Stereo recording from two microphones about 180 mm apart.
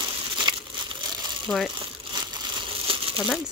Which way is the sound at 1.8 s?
25° right (ahead or behind).